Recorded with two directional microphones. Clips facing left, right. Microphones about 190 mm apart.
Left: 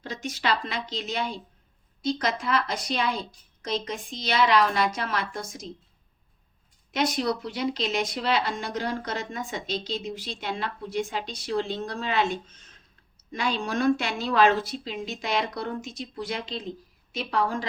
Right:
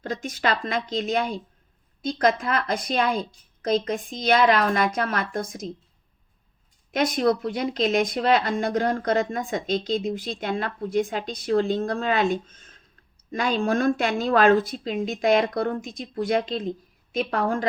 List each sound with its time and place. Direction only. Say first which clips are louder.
0.0 s speech: right 4 dB; 50° right (ahead or behind)
6.9 s speech: right 5 dB; 50° right (ahead or behind)